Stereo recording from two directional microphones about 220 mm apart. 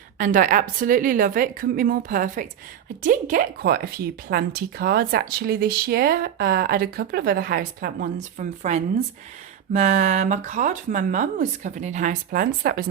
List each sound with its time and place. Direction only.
0.2 s speech: 35° right (ahead or behind)